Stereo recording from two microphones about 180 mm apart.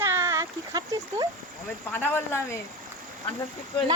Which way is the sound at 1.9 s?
10° left (ahead or behind).